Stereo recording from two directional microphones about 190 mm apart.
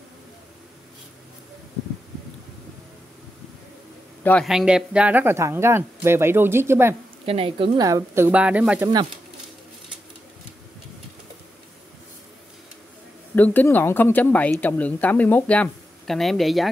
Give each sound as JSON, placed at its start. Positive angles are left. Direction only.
{"t": 4.2, "sound": "a man's voice", "side_deg": 10}
{"t": 4.5, "sound": "speech", "side_deg": -5}
{"t": 7.2, "sound": "speech", "side_deg": -30}
{"t": 13.3, "sound": "speech", "side_deg": 10}